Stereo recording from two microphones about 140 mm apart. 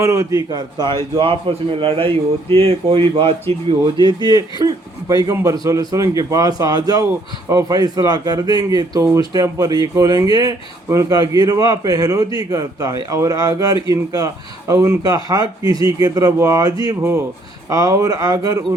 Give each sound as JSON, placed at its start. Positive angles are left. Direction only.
{"t": 0.0, "sound": "a man's voice", "side_deg": -20}
{"t": 4.0, "sound": "a man's voice", "side_deg": -30}